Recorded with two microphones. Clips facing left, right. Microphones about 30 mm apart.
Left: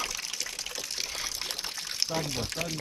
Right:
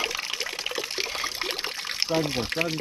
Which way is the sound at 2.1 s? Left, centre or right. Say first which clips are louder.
Right 10 dB; right.